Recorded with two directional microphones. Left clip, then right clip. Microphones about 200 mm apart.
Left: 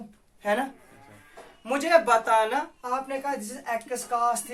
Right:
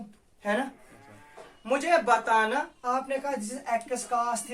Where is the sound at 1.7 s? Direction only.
35° left (ahead or behind).